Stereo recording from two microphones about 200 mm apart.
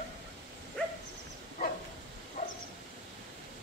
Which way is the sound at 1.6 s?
40° left (ahead or behind).